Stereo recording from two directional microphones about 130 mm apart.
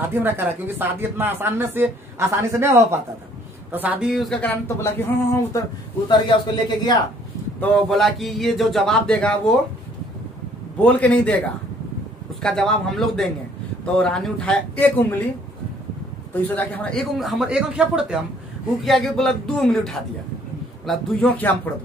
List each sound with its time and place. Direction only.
0.1 s speech: 15° right (ahead or behind)
4.1 s speech: centre (ahead or behind)
4.4 s speech: 20° left (ahead or behind)
6.0 s a man's voice: 35° left (ahead or behind)
7.7 s speech: centre (ahead or behind)
10.8 s speech: 10° left (ahead or behind)
16.3 s speech: 15° left (ahead or behind)
17.2 s speech: centre (ahead or behind)
21.3 s speech: 15° left (ahead or behind)